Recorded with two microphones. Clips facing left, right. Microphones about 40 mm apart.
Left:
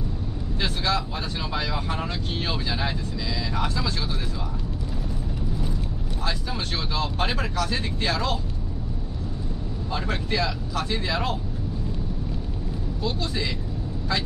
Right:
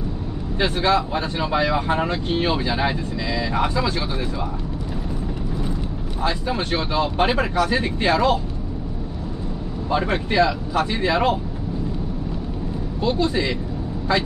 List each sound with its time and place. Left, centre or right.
0.6 s speech: right
6.2 s speech: right
9.8 s speech: right
13.0 s speech: right